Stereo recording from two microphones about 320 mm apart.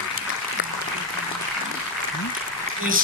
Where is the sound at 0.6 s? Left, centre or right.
Left.